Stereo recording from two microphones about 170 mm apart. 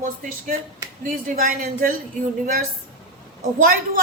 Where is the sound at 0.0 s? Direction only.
50° right (ahead or behind).